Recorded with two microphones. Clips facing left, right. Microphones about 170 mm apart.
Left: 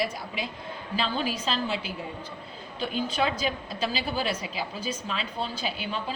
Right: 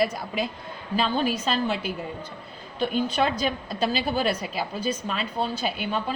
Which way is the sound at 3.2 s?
50° right (ahead or behind).